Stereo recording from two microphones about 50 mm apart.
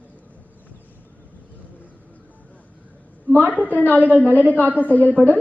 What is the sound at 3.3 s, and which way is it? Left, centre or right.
A man's voice, left.